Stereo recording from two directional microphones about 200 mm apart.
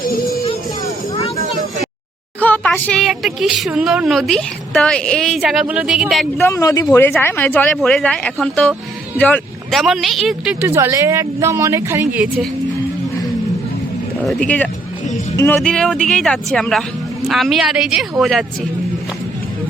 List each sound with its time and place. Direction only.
0.0 s music: 45° left (ahead or behind)
2.4 s speech: 10° left (ahead or behind)
6.4 s speech: 15° left (ahead or behind); by 12.3 s 10° right (ahead or behind)
14.3 s speech: 5° left (ahead or behind)